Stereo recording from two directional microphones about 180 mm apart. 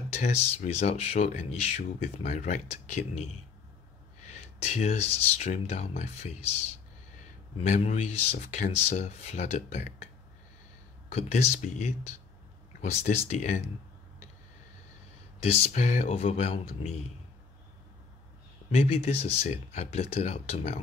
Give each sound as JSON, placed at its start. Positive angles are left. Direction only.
{"t": 0.2, "sound": "speech", "side_deg": 40}
{"t": 4.3, "sound": "speech", "side_deg": 40}
{"t": 7.5, "sound": "speech", "side_deg": 35}
{"t": 11.1, "sound": "speech", "side_deg": 40}
{"t": 15.4, "sound": "speech", "side_deg": 35}
{"t": 18.8, "sound": "speech", "side_deg": 35}